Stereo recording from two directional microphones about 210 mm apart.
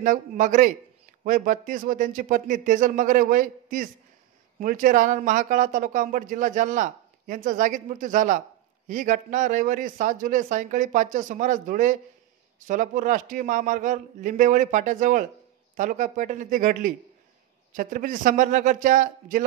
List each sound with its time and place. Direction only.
0.0 s speech: 40° right (ahead or behind)